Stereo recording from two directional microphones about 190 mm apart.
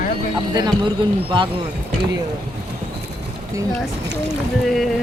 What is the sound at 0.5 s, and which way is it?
Speech, 20° right (ahead or behind).